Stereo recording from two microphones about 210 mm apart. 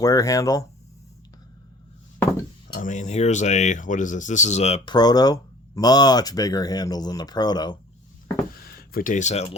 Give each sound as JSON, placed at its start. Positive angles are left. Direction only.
{"t": 0.0, "sound": "speech", "side_deg": 15}
{"t": 2.7, "sound": "speech", "side_deg": 35}
{"t": 8.9, "sound": "speech", "side_deg": 40}